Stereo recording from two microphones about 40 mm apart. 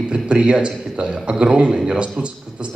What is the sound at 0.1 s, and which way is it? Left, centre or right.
A man's voice, right.